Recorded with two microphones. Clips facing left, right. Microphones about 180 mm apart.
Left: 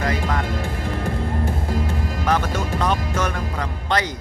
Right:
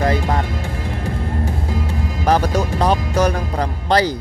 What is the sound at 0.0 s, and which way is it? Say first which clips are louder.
Music: right 5 dB; 30° right (ahead or behind).